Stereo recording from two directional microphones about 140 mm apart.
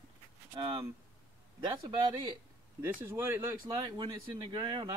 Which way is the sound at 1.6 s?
30° right (ahead or behind).